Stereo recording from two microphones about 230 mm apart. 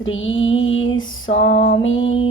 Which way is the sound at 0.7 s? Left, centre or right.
Left.